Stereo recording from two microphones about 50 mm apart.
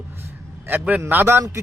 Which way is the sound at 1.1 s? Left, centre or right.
Right.